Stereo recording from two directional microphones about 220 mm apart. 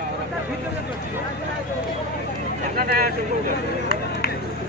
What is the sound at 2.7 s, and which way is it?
Hubbub, 45° right (ahead or behind).